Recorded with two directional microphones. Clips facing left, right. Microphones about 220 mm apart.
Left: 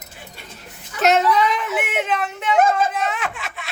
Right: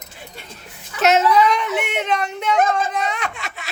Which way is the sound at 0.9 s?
Centre (ahead or behind).